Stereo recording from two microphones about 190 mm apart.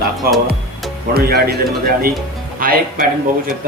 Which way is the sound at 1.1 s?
55° right (ahead or behind).